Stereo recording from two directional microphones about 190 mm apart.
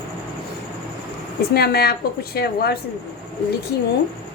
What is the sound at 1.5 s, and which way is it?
A woman's voice, 55° left (ahead or behind).